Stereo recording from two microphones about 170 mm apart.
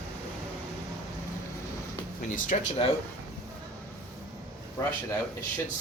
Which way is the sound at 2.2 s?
45° left (ahead or behind).